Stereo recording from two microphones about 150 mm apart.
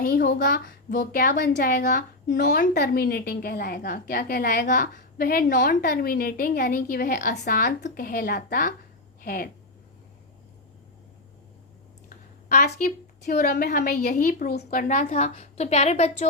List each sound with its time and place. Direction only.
0.0 s speech: 75° left (ahead or behind)
1.1 s speech: 75° left (ahead or behind)
7.8 s speech: 65° left (ahead or behind)
12.0 s a woman's voice: 85° left
14.7 s a woman's voice: 60° left (ahead or behind)